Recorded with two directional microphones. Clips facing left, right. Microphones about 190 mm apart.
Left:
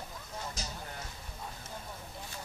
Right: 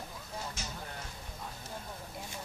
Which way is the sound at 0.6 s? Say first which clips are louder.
Left 1 dB; 35° left (ahead or behind).